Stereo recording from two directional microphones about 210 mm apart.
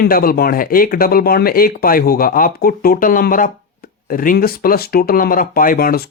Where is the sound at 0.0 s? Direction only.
45° left (ahead or behind).